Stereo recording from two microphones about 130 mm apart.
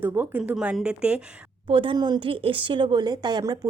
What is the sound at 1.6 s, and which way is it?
A woman's voice, 40° right (ahead or behind).